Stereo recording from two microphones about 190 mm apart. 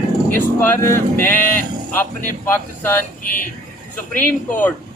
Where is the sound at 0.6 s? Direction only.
10° left (ahead or behind).